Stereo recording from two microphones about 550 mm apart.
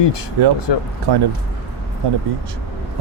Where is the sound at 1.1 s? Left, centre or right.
Right.